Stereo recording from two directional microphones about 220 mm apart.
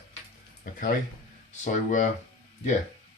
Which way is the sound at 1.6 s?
35° left (ahead or behind).